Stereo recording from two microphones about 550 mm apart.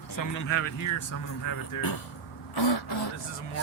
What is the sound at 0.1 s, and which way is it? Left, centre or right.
Speech, left.